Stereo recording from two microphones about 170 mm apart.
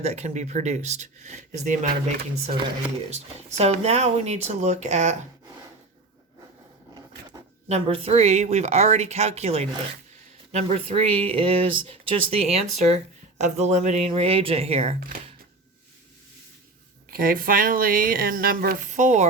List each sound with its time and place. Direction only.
0.0 s speech: 40° right (ahead or behind)
3.1 s speech: 40° right (ahead or behind)
7.7 s speech: 35° right (ahead or behind)
17.1 s speech: 55° right (ahead or behind)